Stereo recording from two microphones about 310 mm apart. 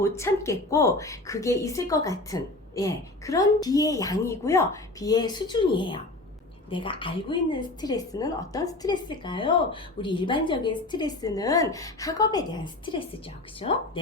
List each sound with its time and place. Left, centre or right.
0.0 s a woman's voice: centre